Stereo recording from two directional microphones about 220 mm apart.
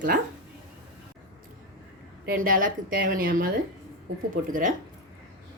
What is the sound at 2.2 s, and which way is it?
Speech, 40° right (ahead or behind).